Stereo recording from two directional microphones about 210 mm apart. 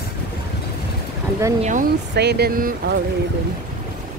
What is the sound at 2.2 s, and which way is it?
Speech, 50° right (ahead or behind).